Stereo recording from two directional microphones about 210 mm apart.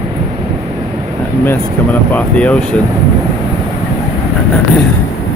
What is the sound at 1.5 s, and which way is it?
Speech, 5° left (ahead or behind).